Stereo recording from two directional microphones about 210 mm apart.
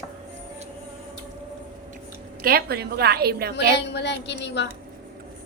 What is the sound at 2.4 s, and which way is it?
A woman's voice, 45° right (ahead or behind).